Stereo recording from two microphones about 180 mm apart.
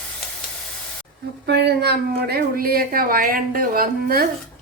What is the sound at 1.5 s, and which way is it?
A woman's voice, 65° right (ahead or behind).